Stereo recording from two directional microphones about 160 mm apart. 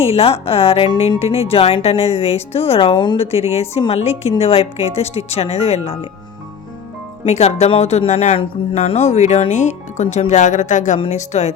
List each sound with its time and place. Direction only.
0.0 s speech: 35° left (ahead or behind)
7.3 s speech: 40° left (ahead or behind)